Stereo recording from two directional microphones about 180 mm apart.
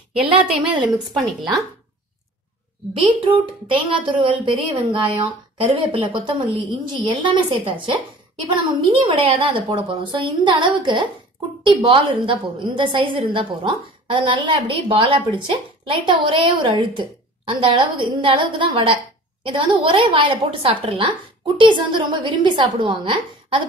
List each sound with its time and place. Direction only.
0.8 s a woman's voice: centre (ahead or behind)
2.9 s a woman's voice: 30° right (ahead or behind)